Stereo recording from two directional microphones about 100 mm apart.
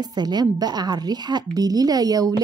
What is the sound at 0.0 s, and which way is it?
A woman's voice, 45° right (ahead or behind).